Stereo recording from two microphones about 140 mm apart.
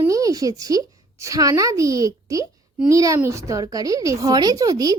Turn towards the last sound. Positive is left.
turn(degrees=-25)  # may be behind; listen again after turning